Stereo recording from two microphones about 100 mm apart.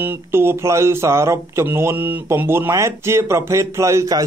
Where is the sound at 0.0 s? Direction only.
25° right (ahead or behind).